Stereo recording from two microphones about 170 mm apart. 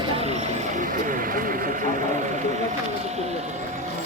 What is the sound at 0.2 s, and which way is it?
Vehicle, 40° right (ahead or behind).